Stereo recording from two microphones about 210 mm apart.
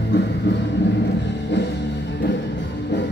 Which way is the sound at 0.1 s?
55° left (ahead or behind).